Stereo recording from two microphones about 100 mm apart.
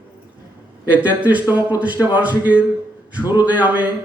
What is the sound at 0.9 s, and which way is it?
A man's voice, 15° right (ahead or behind).